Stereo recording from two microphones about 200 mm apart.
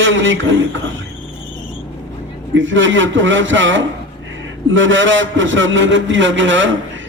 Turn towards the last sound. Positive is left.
turn(degrees=-70)  # may be behind; listen again after turning